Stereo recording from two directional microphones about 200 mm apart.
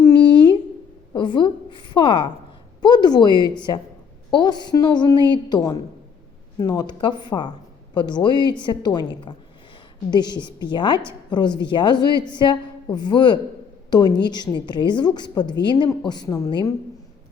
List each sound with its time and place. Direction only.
0.2 s a sound: 60° left (ahead or behind)
1.1 s a woman's voice: 25° left (ahead or behind)
10.1 s a woman's voice: 20° left (ahead or behind)